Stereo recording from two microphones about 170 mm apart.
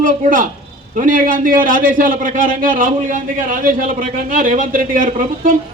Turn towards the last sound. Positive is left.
turn(degrees=-55)  # may be behind; listen again after turning